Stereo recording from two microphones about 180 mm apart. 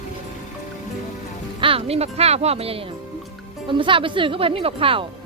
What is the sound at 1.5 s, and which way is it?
A woman's voice, 30° right (ahead or behind).